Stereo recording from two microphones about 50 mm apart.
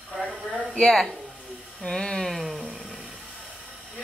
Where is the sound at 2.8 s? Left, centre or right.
Centre.